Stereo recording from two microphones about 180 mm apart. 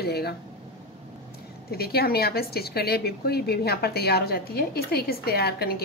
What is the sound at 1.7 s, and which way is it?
Speech, 60° left (ahead or behind).